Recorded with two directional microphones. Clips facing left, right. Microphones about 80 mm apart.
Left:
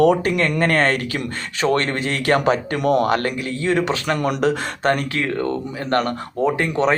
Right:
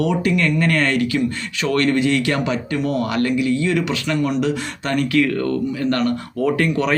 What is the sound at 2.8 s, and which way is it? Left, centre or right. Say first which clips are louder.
Speech: even; left.